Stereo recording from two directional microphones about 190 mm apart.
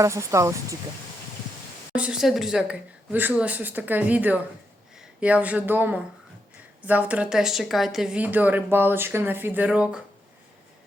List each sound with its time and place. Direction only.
0.0 s a woman's voice: 15° right (ahead or behind)
2.0 s a woman's voice: 5° right (ahead or behind)